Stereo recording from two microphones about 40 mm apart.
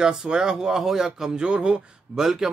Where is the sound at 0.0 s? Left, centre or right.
Centre.